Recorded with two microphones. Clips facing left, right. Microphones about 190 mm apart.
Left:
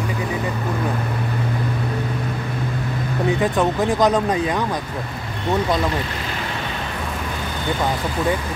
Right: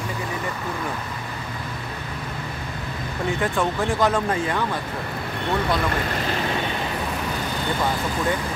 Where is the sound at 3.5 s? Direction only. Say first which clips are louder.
Left 4 dB; 20° left (ahead or behind).